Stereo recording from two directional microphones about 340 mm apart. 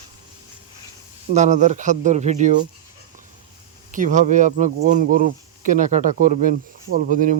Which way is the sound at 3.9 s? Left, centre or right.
Right.